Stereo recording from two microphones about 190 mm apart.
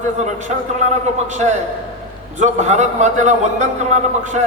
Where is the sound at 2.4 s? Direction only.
40° right (ahead or behind).